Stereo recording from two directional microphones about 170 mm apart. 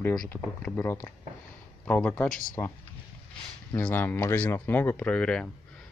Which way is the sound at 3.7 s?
10° left (ahead or behind).